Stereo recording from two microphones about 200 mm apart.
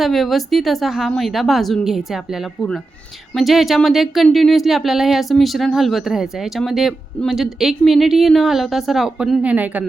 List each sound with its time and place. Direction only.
0.0 s speech: centre (ahead or behind)